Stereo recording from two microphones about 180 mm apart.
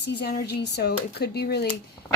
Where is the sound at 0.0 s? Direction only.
70° left (ahead or behind).